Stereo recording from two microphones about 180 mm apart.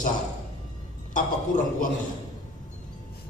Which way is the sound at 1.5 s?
45° left (ahead or behind).